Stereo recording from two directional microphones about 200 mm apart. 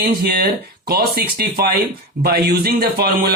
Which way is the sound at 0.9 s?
50° right (ahead or behind).